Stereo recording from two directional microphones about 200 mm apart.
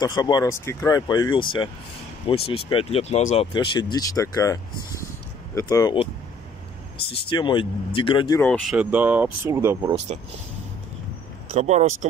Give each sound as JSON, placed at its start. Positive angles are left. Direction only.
{"t": 0.0, "sound": "speech", "side_deg": 20}
{"t": 3.5, "sound": "speech", "side_deg": 20}
{"t": 7.1, "sound": "speech", "side_deg": 25}
{"t": 8.4, "sound": "speech", "side_deg": 0}
{"t": 11.5, "sound": "speech", "side_deg": -35}